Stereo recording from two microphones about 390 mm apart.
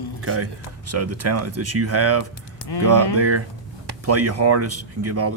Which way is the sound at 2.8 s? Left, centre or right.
Right.